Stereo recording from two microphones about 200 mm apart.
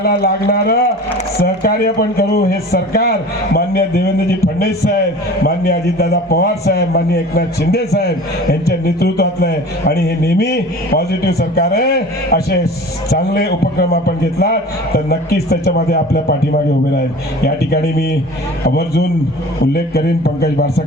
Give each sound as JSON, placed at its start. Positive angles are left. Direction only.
{"t": 0.0, "sound": "a man's voice", "side_deg": 50}
{"t": 5.4, "sound": "a man's voice", "side_deg": 50}
{"t": 17.4, "sound": "a man's voice", "side_deg": 55}